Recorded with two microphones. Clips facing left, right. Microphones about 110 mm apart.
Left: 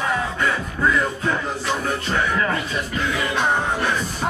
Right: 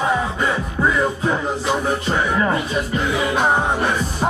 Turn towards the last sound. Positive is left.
turn(degrees=-15)  # may be behind; listen again after turning